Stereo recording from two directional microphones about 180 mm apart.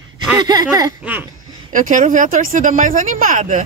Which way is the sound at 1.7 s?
45° right (ahead or behind).